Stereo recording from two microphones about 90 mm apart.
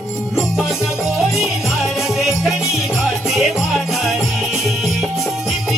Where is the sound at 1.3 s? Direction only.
5° right (ahead or behind).